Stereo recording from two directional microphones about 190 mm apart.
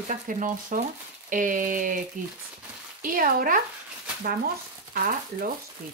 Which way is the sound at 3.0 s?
45° right (ahead or behind).